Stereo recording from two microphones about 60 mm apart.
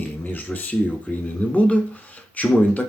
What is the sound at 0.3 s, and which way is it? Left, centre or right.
Speech, left.